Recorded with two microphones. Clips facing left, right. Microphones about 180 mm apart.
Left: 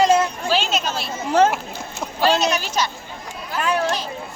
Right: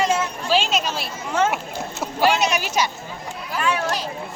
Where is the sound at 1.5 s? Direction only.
10° right (ahead or behind).